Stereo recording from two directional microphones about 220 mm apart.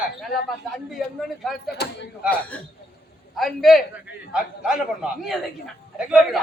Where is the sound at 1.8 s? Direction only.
45° left (ahead or behind).